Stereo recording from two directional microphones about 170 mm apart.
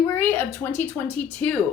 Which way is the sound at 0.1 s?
10° left (ahead or behind).